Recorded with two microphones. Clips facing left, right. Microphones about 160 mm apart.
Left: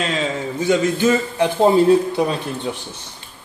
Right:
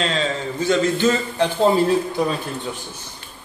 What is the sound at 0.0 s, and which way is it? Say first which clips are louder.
A man's voice: left 1 dB; 10° left (ahead or behind).